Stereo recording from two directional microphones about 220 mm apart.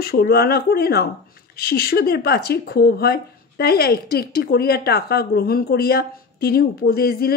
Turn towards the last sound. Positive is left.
turn(degrees=45)  # may be behind; listen again after turning